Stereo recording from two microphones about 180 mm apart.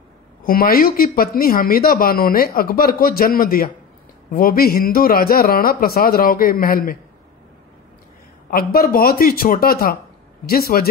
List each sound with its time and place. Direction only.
0.4 s a man's voice: 55° left (ahead or behind)
8.5 s a man's voice: 55° left (ahead or behind)